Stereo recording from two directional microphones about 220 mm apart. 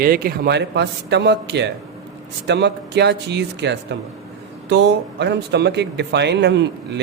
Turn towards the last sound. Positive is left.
turn(degrees=-50)  # may be behind; listen again after turning